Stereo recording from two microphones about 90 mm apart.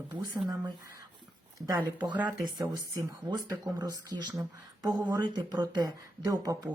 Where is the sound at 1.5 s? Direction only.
45° right (ahead or behind).